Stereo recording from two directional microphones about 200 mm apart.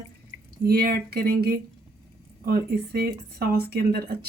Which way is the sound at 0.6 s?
50° right (ahead or behind).